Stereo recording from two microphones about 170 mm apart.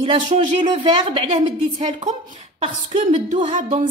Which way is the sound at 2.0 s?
45° right (ahead or behind).